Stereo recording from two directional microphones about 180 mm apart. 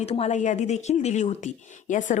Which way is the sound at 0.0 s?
35° left (ahead or behind).